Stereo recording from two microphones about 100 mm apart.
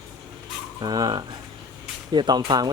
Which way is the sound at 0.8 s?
40° right (ahead or behind).